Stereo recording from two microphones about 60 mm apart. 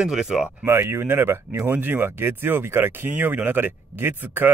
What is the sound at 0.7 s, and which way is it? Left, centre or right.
Speech, right.